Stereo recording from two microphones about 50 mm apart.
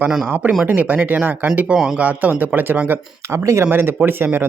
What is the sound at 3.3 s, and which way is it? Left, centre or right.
Speech, right.